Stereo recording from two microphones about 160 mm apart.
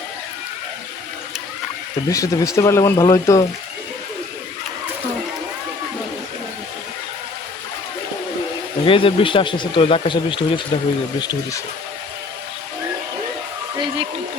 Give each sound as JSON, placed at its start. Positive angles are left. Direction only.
{"t": 2.0, "sound": "speech", "side_deg": 20}
{"t": 8.8, "sound": "speech", "side_deg": 35}
{"t": 13.7, "sound": "a sound", "side_deg": -35}